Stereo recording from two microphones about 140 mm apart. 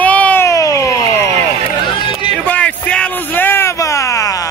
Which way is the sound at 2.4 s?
10° left (ahead or behind).